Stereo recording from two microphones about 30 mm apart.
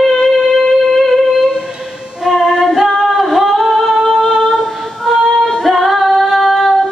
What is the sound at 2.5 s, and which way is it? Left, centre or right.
Singing, centre.